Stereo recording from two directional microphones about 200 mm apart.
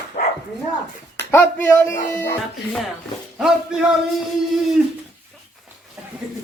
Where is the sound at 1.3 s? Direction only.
10° left (ahead or behind).